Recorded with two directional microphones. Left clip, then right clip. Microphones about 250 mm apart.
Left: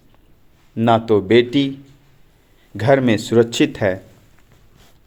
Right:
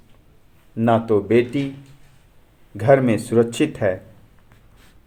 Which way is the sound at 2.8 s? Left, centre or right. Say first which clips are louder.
Left 1 dB; left.